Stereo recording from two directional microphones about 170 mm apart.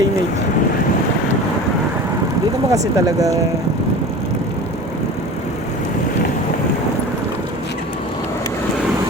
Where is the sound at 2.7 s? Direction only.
20° right (ahead or behind).